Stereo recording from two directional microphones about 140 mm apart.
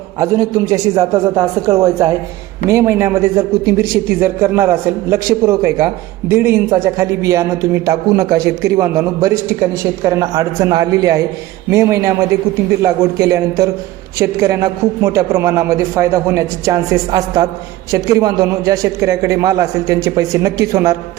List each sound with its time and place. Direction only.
0.2 s a man's voice: 25° right (ahead or behind)
12.8 s a man's voice: 20° right (ahead or behind)